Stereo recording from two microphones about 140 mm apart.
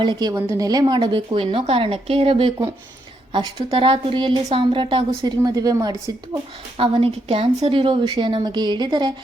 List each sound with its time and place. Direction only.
0.0 s a woman's voice: 30° right (ahead or behind)
0.3 s a woman's voice: 20° right (ahead or behind)
6.7 s a woman's voice: 40° right (ahead or behind)